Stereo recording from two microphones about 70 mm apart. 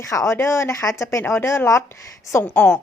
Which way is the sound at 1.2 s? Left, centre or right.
Left.